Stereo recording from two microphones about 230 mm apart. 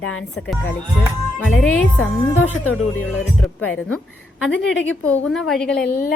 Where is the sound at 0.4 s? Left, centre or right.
Centre.